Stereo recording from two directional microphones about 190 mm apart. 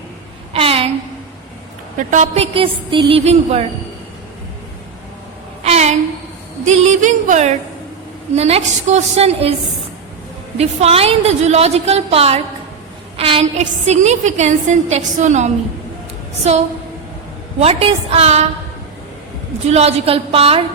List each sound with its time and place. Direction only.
0.5 s a sound: 30° right (ahead or behind)
2.0 s a woman's voice: 40° right (ahead or behind)
5.6 s a sound: 35° right (ahead or behind)
6.7 s a woman's voice: 40° right (ahead or behind)
10.6 s a woman's voice: 35° right (ahead or behind)
19.6 s a woman's voice: 35° right (ahead or behind)